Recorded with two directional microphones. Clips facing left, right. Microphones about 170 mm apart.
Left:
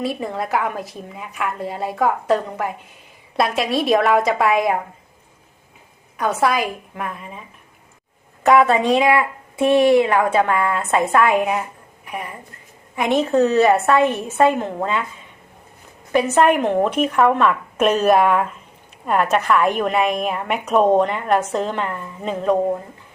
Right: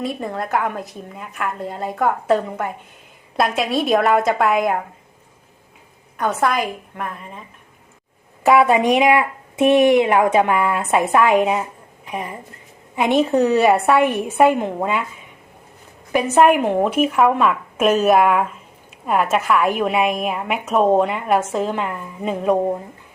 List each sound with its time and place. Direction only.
0.0 s a woman's voice: centre (ahead or behind)
6.1 s a woman's voice: centre (ahead or behind)
8.4 s speech: 10° right (ahead or behind)
16.1 s a woman's voice: 10° right (ahead or behind)